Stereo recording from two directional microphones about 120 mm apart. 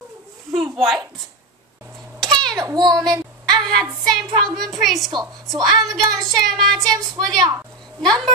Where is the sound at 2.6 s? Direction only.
35° right (ahead or behind).